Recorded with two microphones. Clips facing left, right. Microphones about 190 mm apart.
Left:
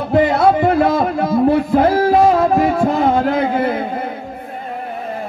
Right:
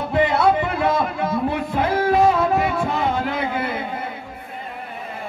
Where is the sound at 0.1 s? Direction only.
40° left (ahead or behind).